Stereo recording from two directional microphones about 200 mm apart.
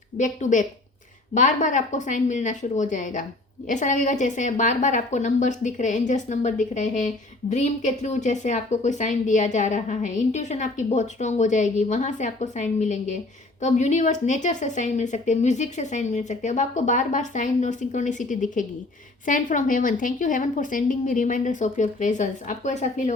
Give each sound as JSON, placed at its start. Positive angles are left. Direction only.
{"t": 0.2, "sound": "a woman's voice", "side_deg": 40}